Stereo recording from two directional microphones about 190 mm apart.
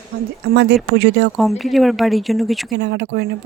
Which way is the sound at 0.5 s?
60° right (ahead or behind).